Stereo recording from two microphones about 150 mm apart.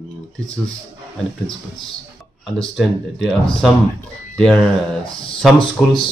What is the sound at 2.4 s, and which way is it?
Speech, centre (ahead or behind).